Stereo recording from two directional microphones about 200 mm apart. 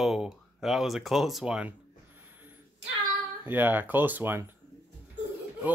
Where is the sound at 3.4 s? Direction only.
10° right (ahead or behind).